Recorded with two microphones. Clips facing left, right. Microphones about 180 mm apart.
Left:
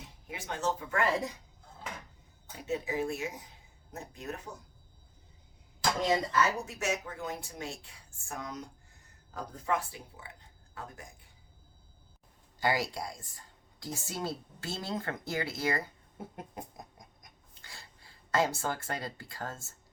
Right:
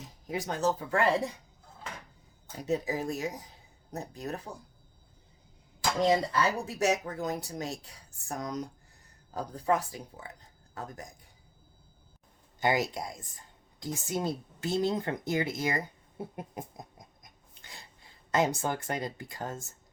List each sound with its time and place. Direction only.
0.0 s speech: 40° right (ahead or behind)
2.6 s speech: 40° right (ahead or behind)
6.0 s speech: 30° right (ahead or behind)
12.5 s speech: 20° right (ahead or behind)